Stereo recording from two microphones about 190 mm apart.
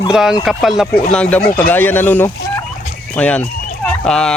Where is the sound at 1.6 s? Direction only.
10° left (ahead or behind).